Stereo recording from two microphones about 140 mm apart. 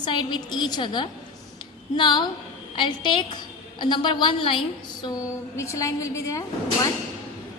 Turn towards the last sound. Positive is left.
turn(degrees=25)  # may be behind; listen again after turning